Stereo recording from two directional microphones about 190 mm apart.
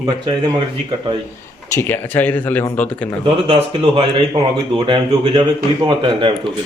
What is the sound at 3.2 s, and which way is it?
Speech, 30° right (ahead or behind).